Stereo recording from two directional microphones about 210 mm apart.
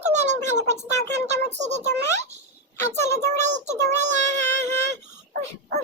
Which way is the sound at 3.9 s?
35° right (ahead or behind).